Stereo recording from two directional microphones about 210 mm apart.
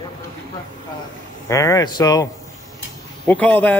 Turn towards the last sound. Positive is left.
turn(degrees=10)  # may be behind; listen again after turning